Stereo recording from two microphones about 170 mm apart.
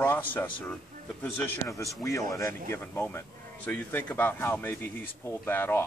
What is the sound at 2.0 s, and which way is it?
Speech, 20° left (ahead or behind).